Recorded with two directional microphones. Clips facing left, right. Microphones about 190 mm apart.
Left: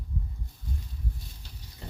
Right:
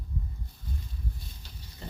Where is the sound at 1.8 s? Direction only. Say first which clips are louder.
Right 2 dB; 5° left (ahead or behind).